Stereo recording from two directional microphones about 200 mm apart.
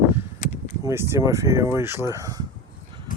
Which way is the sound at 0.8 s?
15° right (ahead or behind).